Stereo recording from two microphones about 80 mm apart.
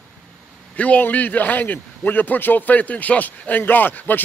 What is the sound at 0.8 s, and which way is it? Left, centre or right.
A man's voice, centre.